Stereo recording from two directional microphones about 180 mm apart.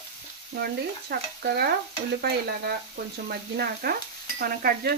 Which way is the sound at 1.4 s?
60° right (ahead or behind).